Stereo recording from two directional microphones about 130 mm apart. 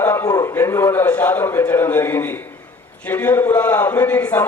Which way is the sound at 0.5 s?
20° left (ahead or behind).